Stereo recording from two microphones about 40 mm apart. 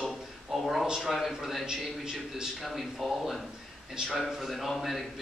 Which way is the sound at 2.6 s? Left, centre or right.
Centre.